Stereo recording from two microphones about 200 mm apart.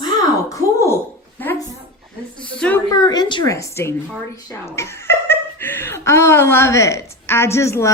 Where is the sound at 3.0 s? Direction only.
20° left (ahead or behind).